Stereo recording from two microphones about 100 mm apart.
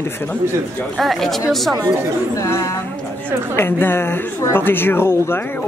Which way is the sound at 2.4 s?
30° left (ahead or behind).